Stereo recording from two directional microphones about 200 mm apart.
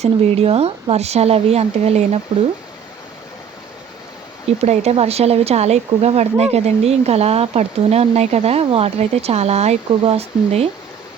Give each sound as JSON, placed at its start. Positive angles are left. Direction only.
{"t": 0.0, "sound": "speech", "side_deg": -30}
{"t": 4.4, "sound": "speech", "side_deg": -35}